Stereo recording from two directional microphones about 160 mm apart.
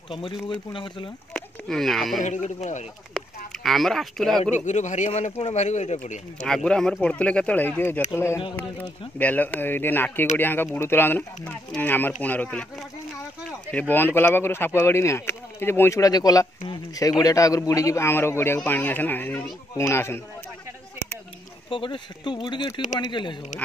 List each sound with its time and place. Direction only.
0.1 s speech: 30° left (ahead or behind)
1.3 s speech: centre (ahead or behind)
2.2 s speech: 50° left (ahead or behind)
3.6 s speech: centre (ahead or behind)
4.6 s speech: 50° left (ahead or behind)
6.4 s speech: 5° left (ahead or behind)
13.7 s speech: 10° left (ahead or behind)
21.6 s speech: 30° left (ahead or behind)